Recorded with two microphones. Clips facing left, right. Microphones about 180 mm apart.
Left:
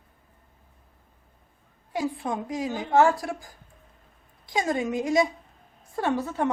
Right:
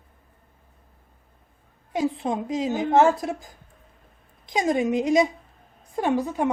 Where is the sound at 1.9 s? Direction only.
20° right (ahead or behind).